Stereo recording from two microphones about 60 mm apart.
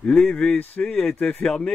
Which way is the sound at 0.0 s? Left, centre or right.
Centre.